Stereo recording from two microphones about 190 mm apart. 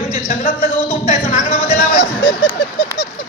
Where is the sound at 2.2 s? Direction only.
25° left (ahead or behind).